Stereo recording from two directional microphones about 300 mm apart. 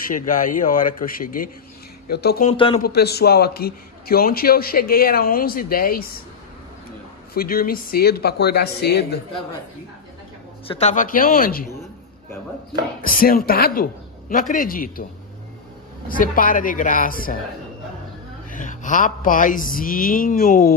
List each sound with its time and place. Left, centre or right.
0.3 s a man's voice: left
2.5 s a man's voice: centre
2.8 s a man's voice: left
7.3 s speech: left
10.7 s a man's voice: left
13.0 s a man's voice: left
16.1 s a man's voice: left
18.5 s a man's voice: left